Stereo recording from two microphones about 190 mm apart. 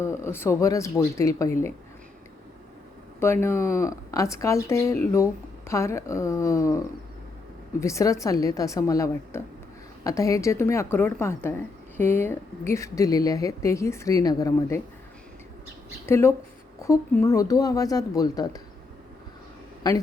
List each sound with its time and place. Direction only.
0.0 s speech: 15° left (ahead or behind)
3.4 s speech: 15° left (ahead or behind)
16.0 s speech: 15° left (ahead or behind)
19.9 s speech: 20° left (ahead or behind)